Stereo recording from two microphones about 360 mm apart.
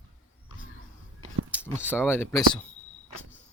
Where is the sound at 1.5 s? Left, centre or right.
Centre.